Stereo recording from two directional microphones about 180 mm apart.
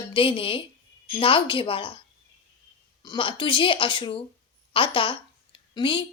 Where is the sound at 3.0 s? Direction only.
25° left (ahead or behind).